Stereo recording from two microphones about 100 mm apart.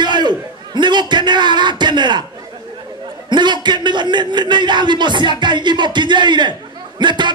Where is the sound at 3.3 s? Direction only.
50° right (ahead or behind).